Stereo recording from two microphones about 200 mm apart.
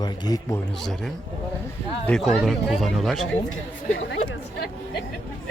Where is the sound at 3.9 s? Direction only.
70° left (ahead or behind).